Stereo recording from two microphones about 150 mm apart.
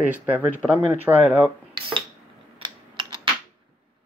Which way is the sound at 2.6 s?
30° right (ahead or behind).